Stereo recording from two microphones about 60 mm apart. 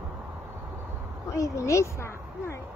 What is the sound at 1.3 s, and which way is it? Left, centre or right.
A woman's voice, left.